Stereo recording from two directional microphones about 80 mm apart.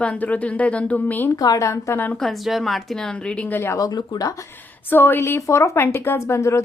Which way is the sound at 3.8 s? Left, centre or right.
Left.